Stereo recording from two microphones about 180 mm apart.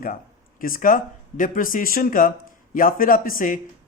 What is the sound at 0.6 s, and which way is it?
A man's voice, 50° left (ahead or behind).